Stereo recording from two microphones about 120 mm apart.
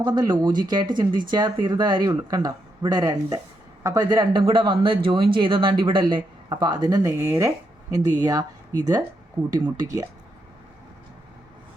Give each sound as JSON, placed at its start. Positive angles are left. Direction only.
{"t": 0.0, "sound": "speech", "side_deg": -35}